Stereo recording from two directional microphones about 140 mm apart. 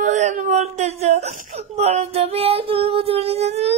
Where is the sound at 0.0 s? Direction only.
60° right (ahead or behind).